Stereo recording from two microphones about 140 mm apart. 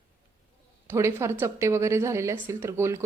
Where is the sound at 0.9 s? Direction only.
20° right (ahead or behind).